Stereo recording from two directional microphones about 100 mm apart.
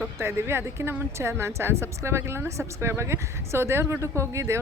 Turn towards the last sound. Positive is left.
turn(degrees=-30)  # may be behind; listen again after turning